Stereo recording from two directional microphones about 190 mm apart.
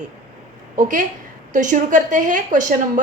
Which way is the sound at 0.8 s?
45° right (ahead or behind).